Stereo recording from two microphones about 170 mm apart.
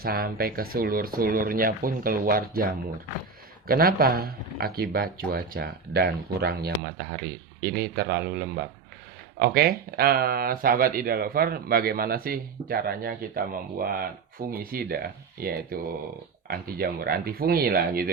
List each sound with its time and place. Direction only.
0.0 s speech: 60° right (ahead or behind)